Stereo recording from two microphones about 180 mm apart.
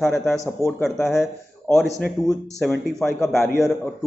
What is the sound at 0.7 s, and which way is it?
A man's voice, centre (ahead or behind).